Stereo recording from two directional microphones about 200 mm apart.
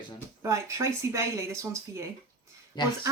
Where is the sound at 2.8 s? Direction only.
20° left (ahead or behind).